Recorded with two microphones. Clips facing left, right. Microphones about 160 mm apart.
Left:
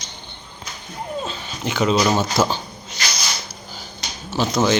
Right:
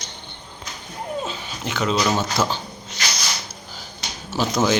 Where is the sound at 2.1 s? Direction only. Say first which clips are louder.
Left 3 dB; 5° left (ahead or behind).